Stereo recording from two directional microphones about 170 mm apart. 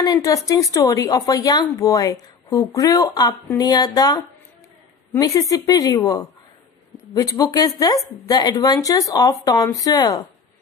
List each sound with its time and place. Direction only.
0.0 s speech: 20° left (ahead or behind)
5.2 s speech: 20° left (ahead or behind)